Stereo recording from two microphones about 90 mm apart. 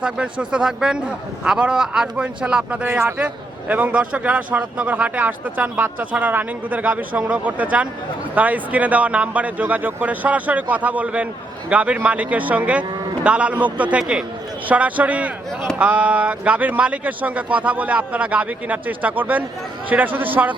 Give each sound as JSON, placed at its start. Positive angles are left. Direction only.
{"t": 0.0, "sound": "a man's voice", "side_deg": -10}
{"t": 2.8, "sound": "a man's voice", "side_deg": -25}